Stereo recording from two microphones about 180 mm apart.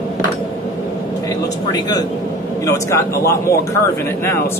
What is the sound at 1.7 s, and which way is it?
A man's voice, 20° left (ahead or behind).